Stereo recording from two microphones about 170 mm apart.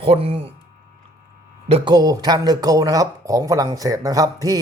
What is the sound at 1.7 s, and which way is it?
A man's voice, 30° right (ahead or behind).